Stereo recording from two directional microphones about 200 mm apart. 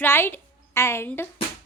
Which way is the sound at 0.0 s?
10° left (ahead or behind).